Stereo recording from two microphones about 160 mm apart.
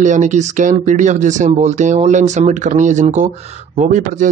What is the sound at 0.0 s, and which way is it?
Speech, 50° right (ahead or behind).